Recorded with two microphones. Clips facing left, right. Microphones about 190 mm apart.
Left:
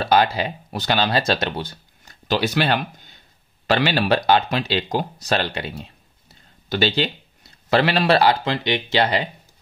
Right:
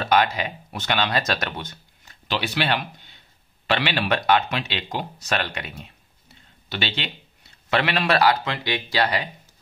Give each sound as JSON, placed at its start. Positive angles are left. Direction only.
{"t": 0.0, "sound": "speech", "side_deg": 30}